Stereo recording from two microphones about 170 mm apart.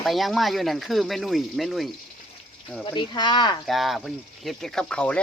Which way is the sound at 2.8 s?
25° left (ahead or behind).